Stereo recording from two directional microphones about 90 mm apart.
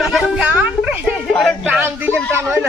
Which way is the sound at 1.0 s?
Centre (ahead or behind).